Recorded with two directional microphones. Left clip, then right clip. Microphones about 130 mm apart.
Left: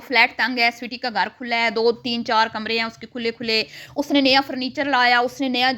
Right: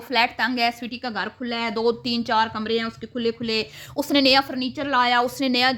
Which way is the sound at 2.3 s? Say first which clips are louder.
Left 2 dB; 30° left (ahead or behind).